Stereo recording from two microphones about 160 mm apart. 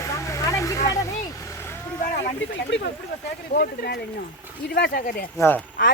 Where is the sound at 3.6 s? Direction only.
80° left.